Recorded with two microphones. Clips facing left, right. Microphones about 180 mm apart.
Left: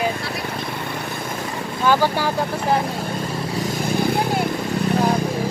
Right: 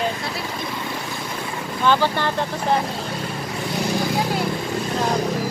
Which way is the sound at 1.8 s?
10° left (ahead or behind).